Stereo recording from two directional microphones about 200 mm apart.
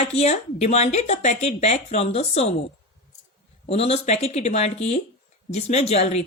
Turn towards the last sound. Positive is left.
turn(degrees=30)  # may be behind; listen again after turning